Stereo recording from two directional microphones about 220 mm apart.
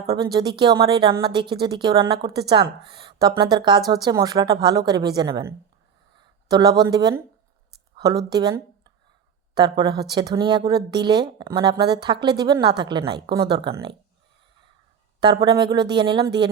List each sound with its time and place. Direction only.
0.5 s speech: 20° right (ahead or behind)
15.2 s speech: 20° right (ahead or behind)